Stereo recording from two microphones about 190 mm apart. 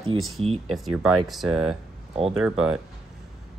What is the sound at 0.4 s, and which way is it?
Speech, 30° right (ahead or behind).